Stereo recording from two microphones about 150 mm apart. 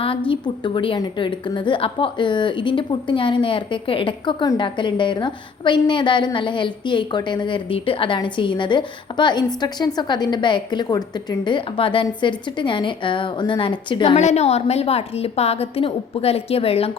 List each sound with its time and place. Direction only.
0.3 s a woman's voice: 35° left (ahead or behind)
14.2 s a woman's voice: 50° left (ahead or behind)